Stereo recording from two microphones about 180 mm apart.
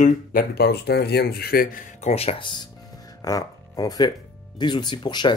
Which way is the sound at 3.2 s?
20° left (ahead or behind).